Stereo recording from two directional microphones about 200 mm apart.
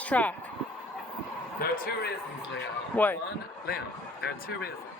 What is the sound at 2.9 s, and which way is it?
Speech, 10° left (ahead or behind).